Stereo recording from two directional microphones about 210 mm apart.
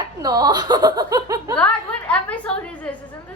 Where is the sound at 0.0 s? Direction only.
20° right (ahead or behind).